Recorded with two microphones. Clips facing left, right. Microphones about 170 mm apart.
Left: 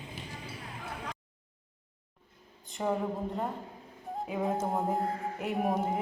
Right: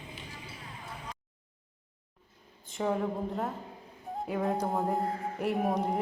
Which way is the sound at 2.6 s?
Centre (ahead or behind).